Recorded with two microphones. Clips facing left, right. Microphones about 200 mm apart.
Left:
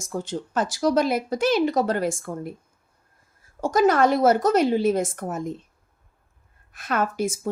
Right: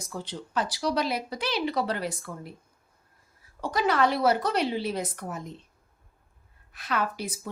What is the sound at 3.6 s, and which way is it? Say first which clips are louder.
Speech: left 6 dB; 45° left (ahead or behind).